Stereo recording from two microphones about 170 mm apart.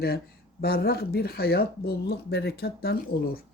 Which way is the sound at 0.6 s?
65° left (ahead or behind).